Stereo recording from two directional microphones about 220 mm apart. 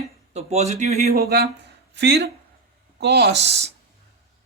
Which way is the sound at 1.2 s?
45° right (ahead or behind).